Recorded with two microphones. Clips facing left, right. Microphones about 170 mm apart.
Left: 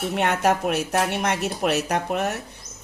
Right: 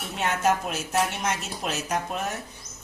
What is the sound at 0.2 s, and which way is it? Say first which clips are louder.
Speech: left 2 dB; 60° left (ahead or behind).